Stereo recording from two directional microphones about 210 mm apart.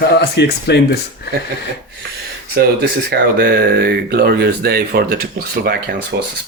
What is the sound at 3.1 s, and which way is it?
Speech, 45° right (ahead or behind).